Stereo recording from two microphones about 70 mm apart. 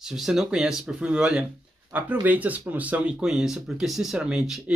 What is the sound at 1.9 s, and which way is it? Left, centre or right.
Speech, right.